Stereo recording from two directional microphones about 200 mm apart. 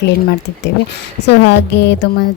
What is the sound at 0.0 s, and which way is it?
A woman's voice, 60° left (ahead or behind).